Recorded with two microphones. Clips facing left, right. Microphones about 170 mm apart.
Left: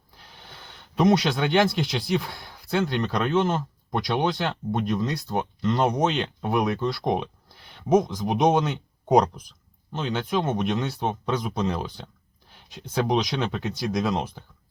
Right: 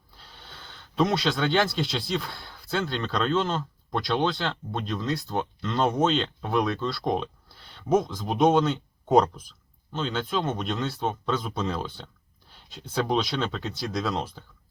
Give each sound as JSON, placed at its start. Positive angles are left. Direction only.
{"t": 0.2, "sound": "speech", "side_deg": 15}